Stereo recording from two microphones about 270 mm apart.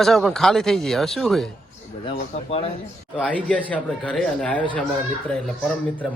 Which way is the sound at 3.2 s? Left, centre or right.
Centre.